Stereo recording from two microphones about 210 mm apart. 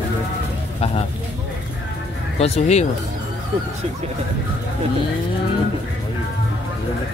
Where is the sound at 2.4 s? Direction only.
30° left (ahead or behind).